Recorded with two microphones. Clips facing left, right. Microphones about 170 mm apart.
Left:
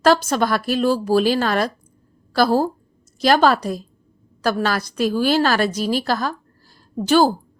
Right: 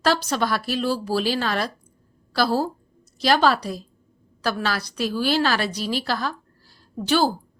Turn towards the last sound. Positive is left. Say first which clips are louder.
# left 5 dB
turn(degrees=45)  # may be behind; listen again after turning